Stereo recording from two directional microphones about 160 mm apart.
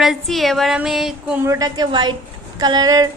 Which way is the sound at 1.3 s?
15° right (ahead or behind).